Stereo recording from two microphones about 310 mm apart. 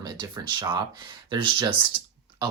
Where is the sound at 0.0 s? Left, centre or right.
Centre.